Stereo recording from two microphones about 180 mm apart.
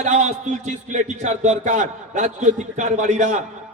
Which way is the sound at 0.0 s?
40° right (ahead or behind).